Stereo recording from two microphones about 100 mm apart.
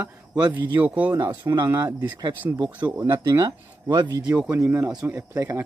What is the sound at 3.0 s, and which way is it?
Speech, 35° right (ahead or behind).